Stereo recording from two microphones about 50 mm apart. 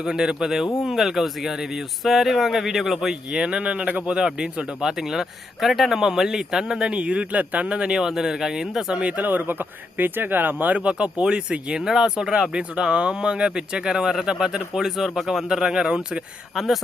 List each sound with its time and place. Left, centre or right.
0.0 s a man's voice: centre
3.4 s speech: centre
4.0 s a man's voice: centre
8.9 s speech: right
9.2 s a man's voice: right; by 16.0 s centre